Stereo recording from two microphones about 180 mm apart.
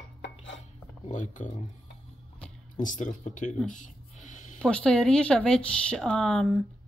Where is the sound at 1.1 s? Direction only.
45° left (ahead or behind).